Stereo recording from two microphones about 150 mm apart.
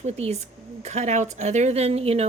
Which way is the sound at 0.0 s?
45° right (ahead or behind).